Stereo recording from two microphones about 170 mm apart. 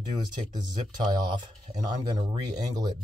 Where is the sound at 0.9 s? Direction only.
25° right (ahead or behind).